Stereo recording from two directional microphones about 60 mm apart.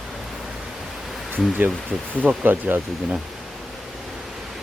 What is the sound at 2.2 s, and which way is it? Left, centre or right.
Speech, right.